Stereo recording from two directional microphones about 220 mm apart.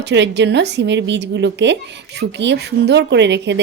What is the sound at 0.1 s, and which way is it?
Speech, 55° right (ahead or behind).